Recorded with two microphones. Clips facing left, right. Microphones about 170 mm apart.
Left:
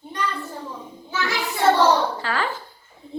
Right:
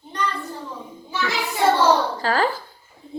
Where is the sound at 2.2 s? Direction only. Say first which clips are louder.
Right 5 dB; 35° right (ahead or behind).